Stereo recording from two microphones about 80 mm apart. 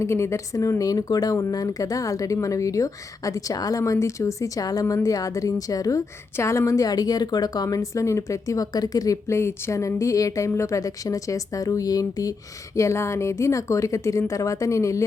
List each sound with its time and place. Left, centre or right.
0.0 s a woman's voice: left
6.3 s a woman's voice: left
12.7 s a woman's voice: left